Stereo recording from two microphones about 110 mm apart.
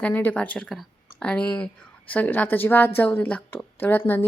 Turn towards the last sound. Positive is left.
turn(degrees=20)  # may be behind; listen again after turning